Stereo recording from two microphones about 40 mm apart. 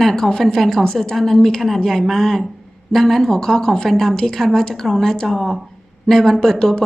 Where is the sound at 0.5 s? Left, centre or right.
Centre.